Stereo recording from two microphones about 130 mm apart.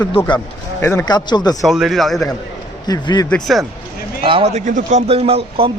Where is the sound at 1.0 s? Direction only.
35° left (ahead or behind).